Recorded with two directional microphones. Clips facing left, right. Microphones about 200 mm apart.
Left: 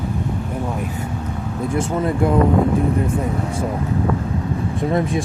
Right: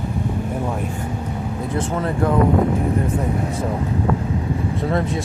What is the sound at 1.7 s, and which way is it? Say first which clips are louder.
Speech: left 3 dB; 10° left (ahead or behind).